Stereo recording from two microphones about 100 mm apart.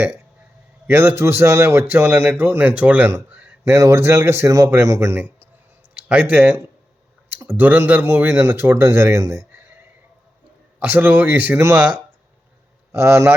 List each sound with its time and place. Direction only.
0.9 s a man's voice: 20° right (ahead or behind)
3.6 s a man's voice: 30° right (ahead or behind)
5.9 s speech: 10° right (ahead or behind)
7.3 s a man's voice: 20° right (ahead or behind)
10.8 s a man's voice: 20° right (ahead or behind)
12.9 s a man's voice: 25° right (ahead or behind)